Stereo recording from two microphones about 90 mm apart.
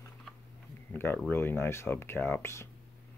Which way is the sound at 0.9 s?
25° left (ahead or behind).